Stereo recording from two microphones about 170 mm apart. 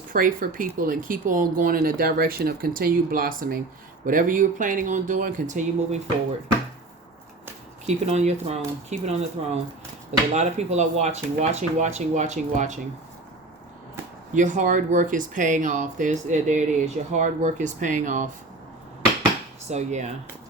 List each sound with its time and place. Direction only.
0.1 s speech: 55° right (ahead or behind)
7.9 s speech: 40° right (ahead or behind)
14.3 s speech: 45° right (ahead or behind)
19.7 s speech: 45° right (ahead or behind)